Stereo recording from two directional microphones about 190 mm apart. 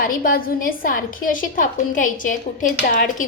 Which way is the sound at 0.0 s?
45° left (ahead or behind).